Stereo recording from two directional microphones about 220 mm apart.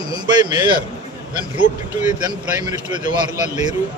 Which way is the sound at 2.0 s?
20° right (ahead or behind).